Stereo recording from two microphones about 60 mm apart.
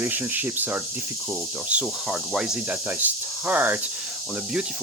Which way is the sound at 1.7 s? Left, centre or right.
Centre.